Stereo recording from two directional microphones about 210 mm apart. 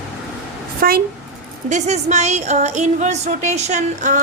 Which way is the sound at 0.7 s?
45° right (ahead or behind).